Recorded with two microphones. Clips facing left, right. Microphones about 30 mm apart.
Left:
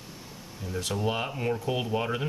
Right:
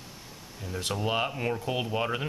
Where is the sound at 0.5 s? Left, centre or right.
Centre.